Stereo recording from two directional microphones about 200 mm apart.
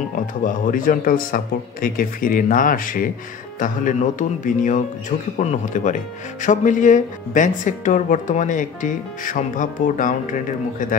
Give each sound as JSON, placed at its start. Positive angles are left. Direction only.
{"t": 0.4, "sound": "a man's voice", "side_deg": 45}